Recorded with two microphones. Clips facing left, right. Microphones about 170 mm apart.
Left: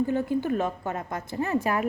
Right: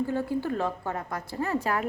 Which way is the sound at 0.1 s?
20° left (ahead or behind).